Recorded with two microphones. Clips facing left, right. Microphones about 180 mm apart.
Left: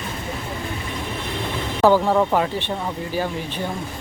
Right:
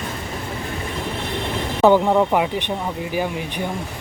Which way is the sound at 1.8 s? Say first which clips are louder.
Right 2 dB; 20° right (ahead or behind).